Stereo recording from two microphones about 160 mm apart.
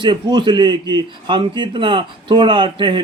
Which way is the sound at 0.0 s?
30° right (ahead or behind).